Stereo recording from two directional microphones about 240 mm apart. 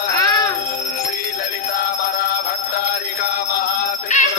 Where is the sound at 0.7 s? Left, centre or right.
Left.